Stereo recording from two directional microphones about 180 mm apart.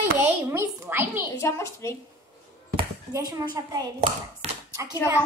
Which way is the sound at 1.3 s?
15° left (ahead or behind).